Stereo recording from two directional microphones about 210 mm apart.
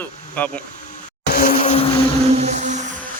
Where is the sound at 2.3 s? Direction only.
35° right (ahead or behind).